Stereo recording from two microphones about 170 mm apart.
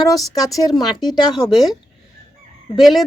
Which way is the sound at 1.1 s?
25° left (ahead or behind).